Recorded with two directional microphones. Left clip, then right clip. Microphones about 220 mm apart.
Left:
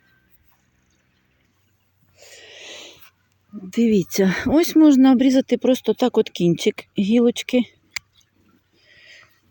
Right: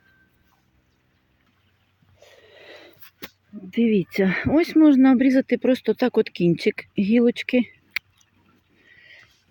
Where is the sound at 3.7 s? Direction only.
15° left (ahead or behind).